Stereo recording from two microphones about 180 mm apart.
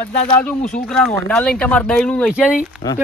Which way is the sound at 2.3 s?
5° right (ahead or behind).